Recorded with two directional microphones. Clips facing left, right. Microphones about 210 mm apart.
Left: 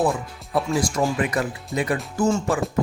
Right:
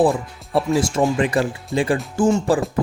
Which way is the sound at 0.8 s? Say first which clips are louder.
Right 4 dB; 25° right (ahead or behind).